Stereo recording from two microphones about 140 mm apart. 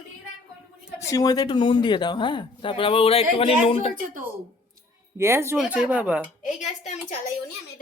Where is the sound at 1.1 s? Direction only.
25° left (ahead or behind); by 3.9 s 40° left (ahead or behind).